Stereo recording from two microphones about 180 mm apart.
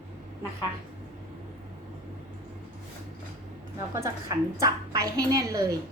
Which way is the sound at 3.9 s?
20° right (ahead or behind).